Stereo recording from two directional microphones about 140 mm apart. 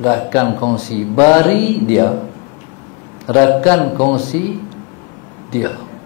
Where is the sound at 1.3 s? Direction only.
15° left (ahead or behind).